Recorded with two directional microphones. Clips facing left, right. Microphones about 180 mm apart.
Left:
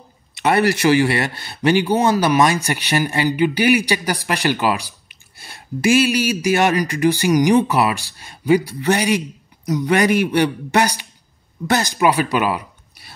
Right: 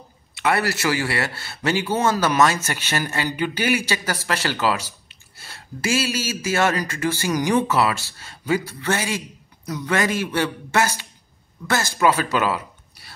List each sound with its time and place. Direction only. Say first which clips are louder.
0.4 s speech: left 6 dB; 20° left (ahead or behind)